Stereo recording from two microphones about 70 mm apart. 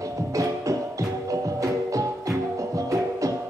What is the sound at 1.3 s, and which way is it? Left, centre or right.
Music, right.